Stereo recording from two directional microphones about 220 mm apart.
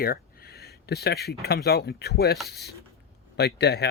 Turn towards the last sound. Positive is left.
turn(degrees=50)  # may be behind; listen again after turning